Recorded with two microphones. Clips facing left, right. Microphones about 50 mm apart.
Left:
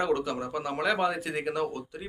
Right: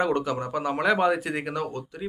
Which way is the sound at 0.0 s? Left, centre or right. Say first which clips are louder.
Right 3 dB; centre.